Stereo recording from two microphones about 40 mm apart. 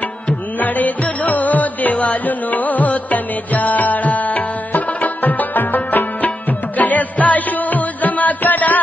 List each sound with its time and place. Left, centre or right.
0.3 s music: left